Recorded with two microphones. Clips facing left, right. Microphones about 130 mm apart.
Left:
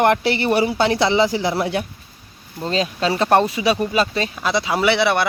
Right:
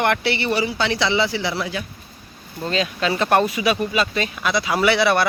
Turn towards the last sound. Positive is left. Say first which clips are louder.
# even
turn(degrees=20)  # may be behind; listen again after turning